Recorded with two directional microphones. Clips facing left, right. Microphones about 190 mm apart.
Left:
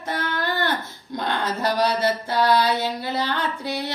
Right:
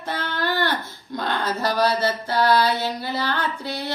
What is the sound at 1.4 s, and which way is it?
Mantra, 20° left (ahead or behind).